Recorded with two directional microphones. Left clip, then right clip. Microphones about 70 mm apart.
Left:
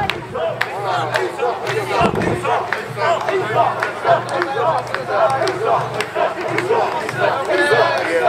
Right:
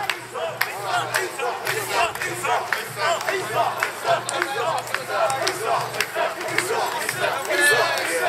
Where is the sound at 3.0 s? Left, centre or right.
Centre.